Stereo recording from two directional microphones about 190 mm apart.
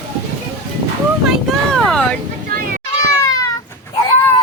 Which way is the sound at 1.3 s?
Centre (ahead or behind).